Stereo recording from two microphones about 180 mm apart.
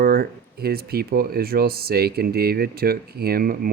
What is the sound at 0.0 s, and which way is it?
Speech, 55° right (ahead or behind).